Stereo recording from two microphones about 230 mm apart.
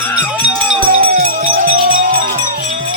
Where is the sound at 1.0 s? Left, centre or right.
Right.